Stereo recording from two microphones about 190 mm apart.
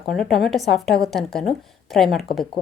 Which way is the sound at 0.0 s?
Centre (ahead or behind).